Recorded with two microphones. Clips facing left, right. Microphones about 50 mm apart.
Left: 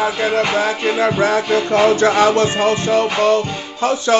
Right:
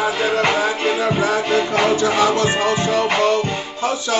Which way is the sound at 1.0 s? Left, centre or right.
Left.